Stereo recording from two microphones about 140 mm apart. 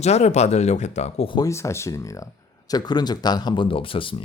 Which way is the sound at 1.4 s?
20° left (ahead or behind).